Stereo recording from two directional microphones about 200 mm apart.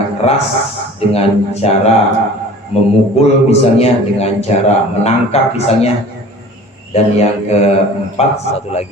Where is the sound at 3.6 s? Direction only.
30° left (ahead or behind).